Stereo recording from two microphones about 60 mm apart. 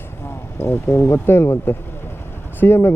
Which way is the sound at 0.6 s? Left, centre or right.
Left.